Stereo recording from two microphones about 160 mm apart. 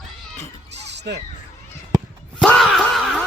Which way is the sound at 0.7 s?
90° right.